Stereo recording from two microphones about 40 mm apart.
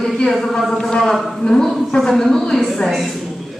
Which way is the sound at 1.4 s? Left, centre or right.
Left.